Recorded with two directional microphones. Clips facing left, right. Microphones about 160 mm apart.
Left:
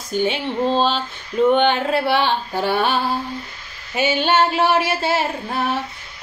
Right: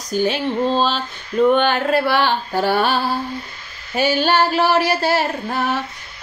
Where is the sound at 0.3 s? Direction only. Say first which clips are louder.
Right 1 dB; 20° left (ahead or behind).